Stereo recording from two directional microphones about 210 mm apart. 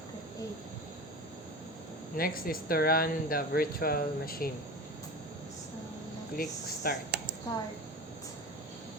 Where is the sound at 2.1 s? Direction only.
45° left (ahead or behind).